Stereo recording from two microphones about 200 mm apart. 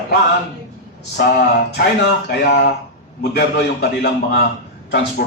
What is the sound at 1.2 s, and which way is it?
Speech, 50° left (ahead or behind).